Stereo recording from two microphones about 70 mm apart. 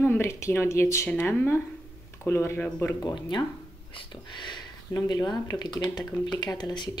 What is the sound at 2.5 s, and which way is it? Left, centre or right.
Speech, left.